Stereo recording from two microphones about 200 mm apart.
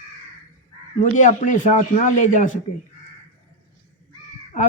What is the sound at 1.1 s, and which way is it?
A man's voice, 40° left (ahead or behind).